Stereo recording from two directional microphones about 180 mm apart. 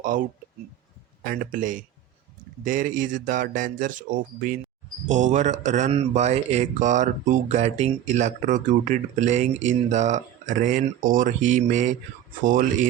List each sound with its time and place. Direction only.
0.1 s speech: 50° right (ahead or behind)